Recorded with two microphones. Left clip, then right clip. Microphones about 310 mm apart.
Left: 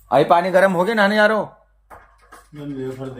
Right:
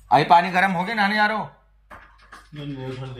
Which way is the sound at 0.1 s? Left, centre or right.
Centre.